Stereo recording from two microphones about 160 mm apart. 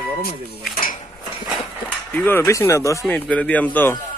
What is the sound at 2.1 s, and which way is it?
Speech, 10° left (ahead or behind).